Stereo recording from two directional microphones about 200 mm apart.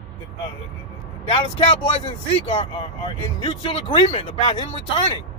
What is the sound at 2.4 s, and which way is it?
Speech, 25° left (ahead or behind).